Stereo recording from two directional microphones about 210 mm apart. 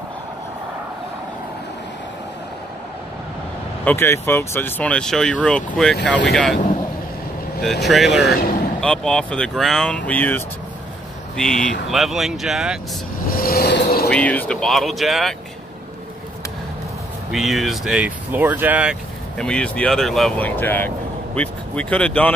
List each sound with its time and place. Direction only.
3.8 s speech: 10° left (ahead or behind)
7.8 s speech: centre (ahead or behind)
13.3 s vehicle: 45° left (ahead or behind)
14.0 s speech: 5° left (ahead or behind)
17.3 s speech: centre (ahead or behind)
19.3 s speech: 5° left (ahead or behind)